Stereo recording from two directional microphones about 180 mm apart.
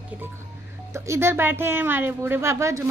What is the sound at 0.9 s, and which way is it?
A woman's voice, 15° right (ahead or behind).